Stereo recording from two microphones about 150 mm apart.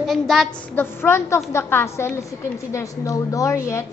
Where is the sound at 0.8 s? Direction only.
15° left (ahead or behind).